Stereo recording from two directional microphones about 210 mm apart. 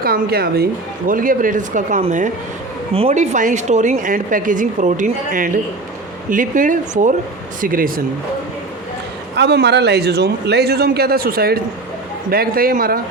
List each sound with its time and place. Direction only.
0.0 s a woman's voice: 45° right (ahead or behind)
9.3 s a man's voice: 50° right (ahead or behind)